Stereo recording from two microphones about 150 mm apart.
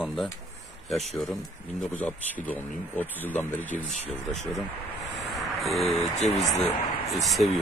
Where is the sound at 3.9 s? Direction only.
50° left (ahead or behind).